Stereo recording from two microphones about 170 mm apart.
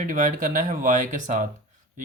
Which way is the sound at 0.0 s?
50° right (ahead or behind).